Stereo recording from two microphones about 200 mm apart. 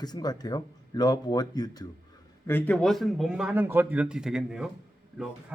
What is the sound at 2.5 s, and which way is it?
Speech, 10° left (ahead or behind).